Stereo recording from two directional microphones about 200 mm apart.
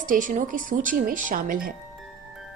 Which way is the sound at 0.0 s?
40° right (ahead or behind).